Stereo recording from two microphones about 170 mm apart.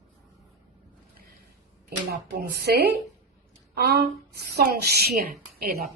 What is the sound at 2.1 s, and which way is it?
Speech, 70° right (ahead or behind).